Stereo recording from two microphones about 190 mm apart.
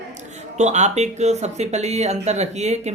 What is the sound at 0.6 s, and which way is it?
Speech, 35° right (ahead or behind).